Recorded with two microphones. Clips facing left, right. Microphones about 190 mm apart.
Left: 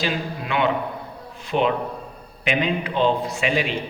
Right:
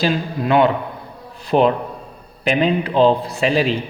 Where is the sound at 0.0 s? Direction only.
40° right (ahead or behind).